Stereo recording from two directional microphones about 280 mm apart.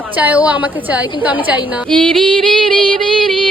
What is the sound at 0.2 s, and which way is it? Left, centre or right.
Speech, centre.